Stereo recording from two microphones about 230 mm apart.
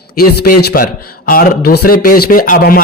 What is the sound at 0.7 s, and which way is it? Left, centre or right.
Speech, left.